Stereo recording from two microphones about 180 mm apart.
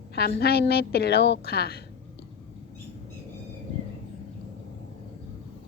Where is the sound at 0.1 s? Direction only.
65° left (ahead or behind).